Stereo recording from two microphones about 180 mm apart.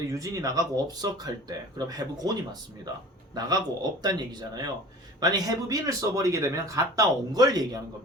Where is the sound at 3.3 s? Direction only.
20° right (ahead or behind).